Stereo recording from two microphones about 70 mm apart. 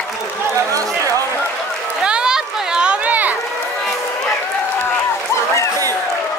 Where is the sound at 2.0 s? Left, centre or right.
Centre.